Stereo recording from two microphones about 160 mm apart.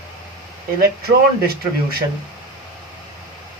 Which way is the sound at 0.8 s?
70° right (ahead or behind).